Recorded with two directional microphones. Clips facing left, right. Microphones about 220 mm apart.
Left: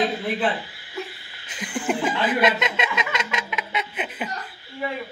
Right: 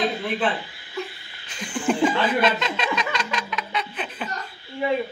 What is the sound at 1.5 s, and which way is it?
Speech, 20° left (ahead or behind).